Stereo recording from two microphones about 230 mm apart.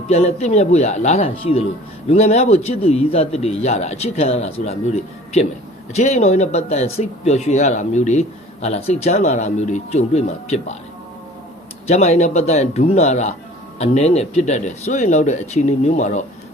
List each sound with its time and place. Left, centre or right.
0.1 s speech: left
5.9 s speech: left
11.9 s speech: left